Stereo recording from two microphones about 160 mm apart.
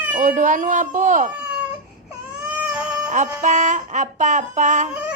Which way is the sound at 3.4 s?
50° right (ahead or behind).